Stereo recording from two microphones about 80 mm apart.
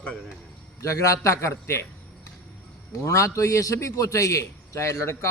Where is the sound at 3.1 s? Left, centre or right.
Left.